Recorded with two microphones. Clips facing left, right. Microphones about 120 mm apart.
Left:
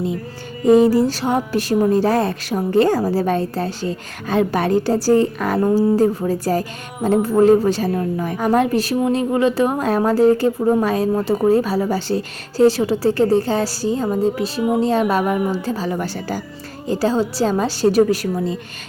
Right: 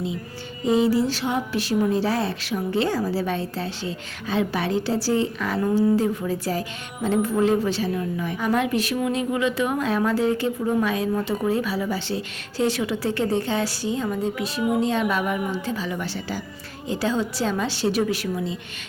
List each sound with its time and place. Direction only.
0.6 s speech: 50° left (ahead or behind)